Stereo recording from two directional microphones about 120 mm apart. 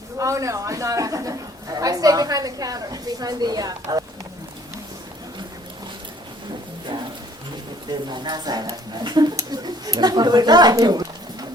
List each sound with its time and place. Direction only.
0.2 s a woman's voice: 25° right (ahead or behind)
8.1 s a woman's voice: 35° right (ahead or behind)